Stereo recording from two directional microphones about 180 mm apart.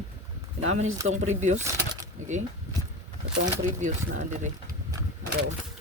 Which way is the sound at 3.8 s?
45° right (ahead or behind).